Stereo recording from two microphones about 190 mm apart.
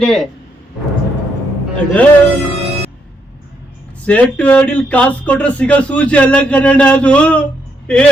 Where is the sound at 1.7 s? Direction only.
5° left (ahead or behind).